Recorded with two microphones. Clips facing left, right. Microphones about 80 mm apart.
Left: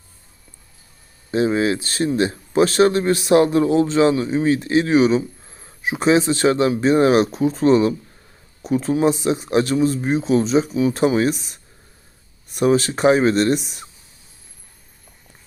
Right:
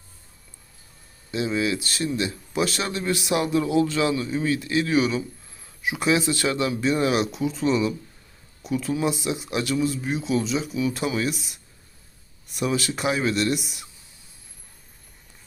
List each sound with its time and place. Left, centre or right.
1.3 s speech: left